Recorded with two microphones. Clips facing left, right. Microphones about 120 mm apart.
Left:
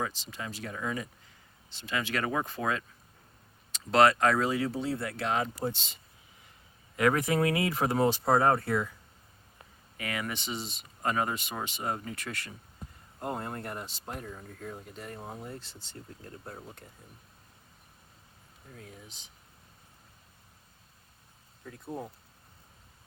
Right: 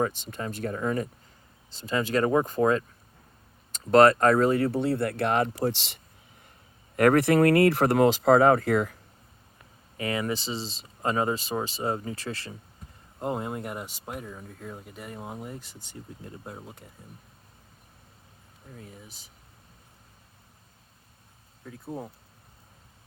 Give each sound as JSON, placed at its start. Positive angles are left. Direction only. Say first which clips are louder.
{"t": 0.0, "sound": "speech", "louder": "right 7 dB", "side_deg": -55}
{"t": 6.9, "sound": "speech", "louder": "right 7 dB", "side_deg": -55}
{"t": 10.0, "sound": "speech", "louder": "right 7 dB", "side_deg": -30}
{"t": 13.1, "sound": "speech", "louder": "right 5 dB", "side_deg": -20}
{"t": 18.8, "sound": "speech", "louder": "right 1 dB", "side_deg": 0}
{"t": 21.7, "sound": "speech", "louder": "right 2 dB", "side_deg": 0}